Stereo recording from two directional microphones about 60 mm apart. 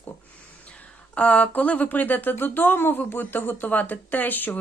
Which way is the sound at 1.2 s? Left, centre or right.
Left.